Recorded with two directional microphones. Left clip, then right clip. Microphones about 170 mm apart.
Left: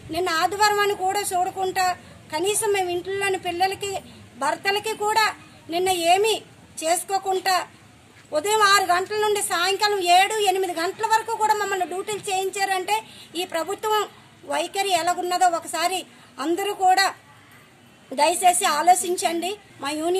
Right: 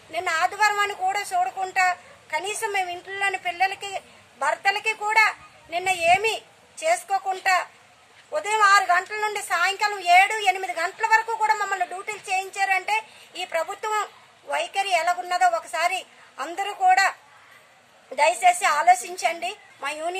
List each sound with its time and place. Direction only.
0.1 s speech: centre (ahead or behind)
18.1 s speech: centre (ahead or behind)